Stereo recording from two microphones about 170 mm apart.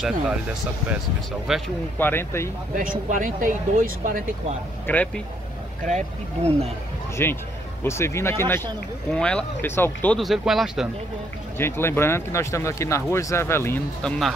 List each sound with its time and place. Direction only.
1.5 s speech: centre (ahead or behind)
2.0 s speech: 10° left (ahead or behind)
2.7 s speech: 55° right (ahead or behind)
4.8 s speech: 10° left (ahead or behind)
5.9 s speech: 40° right (ahead or behind)
7.2 s speech: 15° left (ahead or behind)
10.1 s speech: centre (ahead or behind)
11.5 s speech: 15° left (ahead or behind)